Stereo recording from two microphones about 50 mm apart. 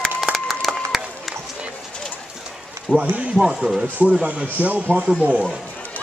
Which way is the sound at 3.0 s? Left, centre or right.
Right.